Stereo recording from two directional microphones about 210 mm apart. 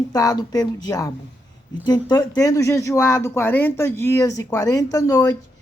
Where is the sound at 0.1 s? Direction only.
15° left (ahead or behind).